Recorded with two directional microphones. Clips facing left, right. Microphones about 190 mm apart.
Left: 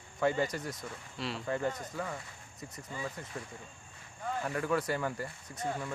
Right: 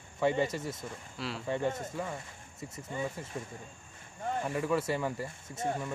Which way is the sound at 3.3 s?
20° right (ahead or behind).